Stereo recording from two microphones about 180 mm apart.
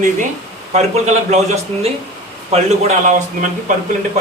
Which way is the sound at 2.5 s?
40° right (ahead or behind).